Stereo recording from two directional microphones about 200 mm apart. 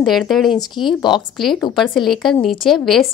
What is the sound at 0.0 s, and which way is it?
A woman's voice, centre (ahead or behind).